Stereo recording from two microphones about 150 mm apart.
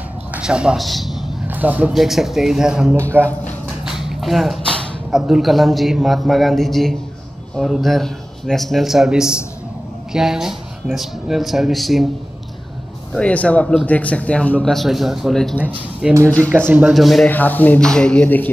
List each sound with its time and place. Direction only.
0.3 s a man's voice: 5° right (ahead or behind)
3.0 s a man's voice: 15° right (ahead or behind)
3.8 s a sound: 5° right (ahead or behind)
5.1 s speech: 5° right (ahead or behind)
13.1 s a man's voice: 10° left (ahead or behind); by 16.9 s 10° right (ahead or behind)
16.9 s speech: centre (ahead or behind)
17.3 s speech: 10° left (ahead or behind)